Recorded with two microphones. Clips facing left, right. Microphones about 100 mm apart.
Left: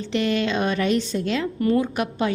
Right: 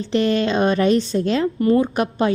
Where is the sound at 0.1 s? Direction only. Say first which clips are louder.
Right 4 dB; 35° right (ahead or behind).